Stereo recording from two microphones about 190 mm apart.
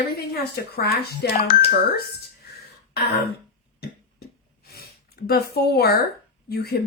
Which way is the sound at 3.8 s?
55° left (ahead or behind).